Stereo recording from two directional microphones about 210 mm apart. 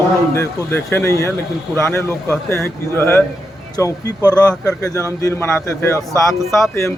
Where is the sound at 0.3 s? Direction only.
10° left (ahead or behind).